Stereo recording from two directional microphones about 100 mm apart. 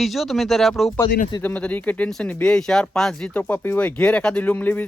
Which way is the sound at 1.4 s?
15° left (ahead or behind).